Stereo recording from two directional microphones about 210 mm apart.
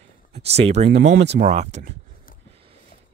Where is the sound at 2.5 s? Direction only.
25° right (ahead or behind).